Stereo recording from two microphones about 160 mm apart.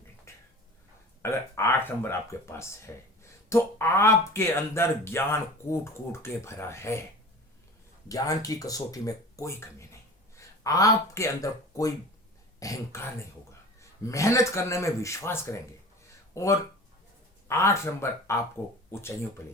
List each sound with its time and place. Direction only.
0.3 s a sound: 15° left (ahead or behind)
1.2 s speech: 15° left (ahead or behind)
8.0 s speech: 20° left (ahead or behind)